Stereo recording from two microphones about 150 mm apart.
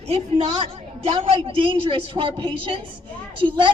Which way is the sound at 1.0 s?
35° right (ahead or behind).